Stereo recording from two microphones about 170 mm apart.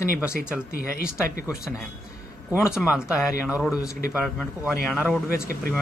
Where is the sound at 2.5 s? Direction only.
5° right (ahead or behind).